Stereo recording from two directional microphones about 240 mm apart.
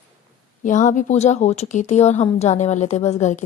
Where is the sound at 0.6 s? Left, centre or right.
Left.